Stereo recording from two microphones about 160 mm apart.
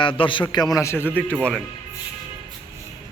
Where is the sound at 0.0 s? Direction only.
30° left (ahead or behind); by 1.4 s 10° left (ahead or behind).